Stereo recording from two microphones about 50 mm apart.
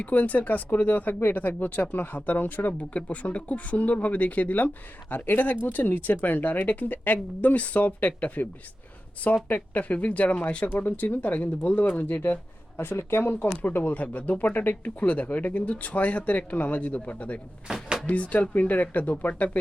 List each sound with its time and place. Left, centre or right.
0.0 s speech: left
10.7 s speech: left
11.9 s speech: left
13.6 s speech: left